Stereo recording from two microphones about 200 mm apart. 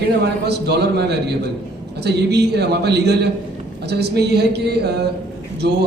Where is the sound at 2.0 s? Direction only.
55° right (ahead or behind).